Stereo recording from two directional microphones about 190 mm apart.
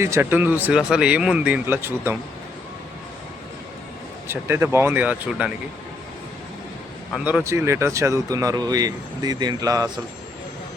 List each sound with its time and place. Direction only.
0.0 s speech: 15° right (ahead or behind)
4.3 s speech: 10° right (ahead or behind)
7.3 s speech: 10° right (ahead or behind)